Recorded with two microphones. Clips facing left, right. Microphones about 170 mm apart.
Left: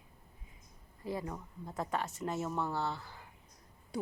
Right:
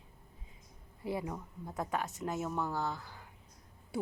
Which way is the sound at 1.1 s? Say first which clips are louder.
Right 1 dB; 5° right (ahead or behind).